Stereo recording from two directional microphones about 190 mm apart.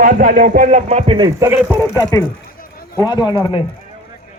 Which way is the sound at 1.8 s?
15° left (ahead or behind).